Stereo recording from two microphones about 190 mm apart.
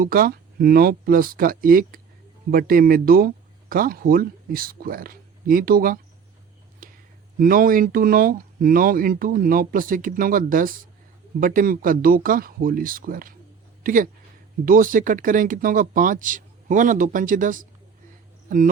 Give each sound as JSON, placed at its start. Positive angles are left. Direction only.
{"t": 0.0, "sound": "speech", "side_deg": -50}
{"t": 6.8, "sound": "a sound", "side_deg": -45}
{"t": 7.3, "sound": "speech", "side_deg": -50}
{"t": 18.4, "sound": "cricket", "side_deg": -45}